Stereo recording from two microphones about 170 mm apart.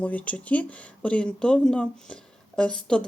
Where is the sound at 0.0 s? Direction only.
10° left (ahead or behind).